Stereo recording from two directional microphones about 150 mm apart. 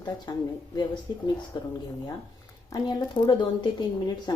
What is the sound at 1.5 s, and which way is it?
Speech, 30° left (ahead or behind).